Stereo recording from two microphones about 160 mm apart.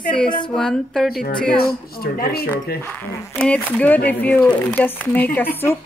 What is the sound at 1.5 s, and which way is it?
Speech, 65° left (ahead or behind).